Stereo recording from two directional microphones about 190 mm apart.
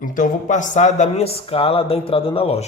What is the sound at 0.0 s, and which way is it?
A man's voice, 45° left (ahead or behind).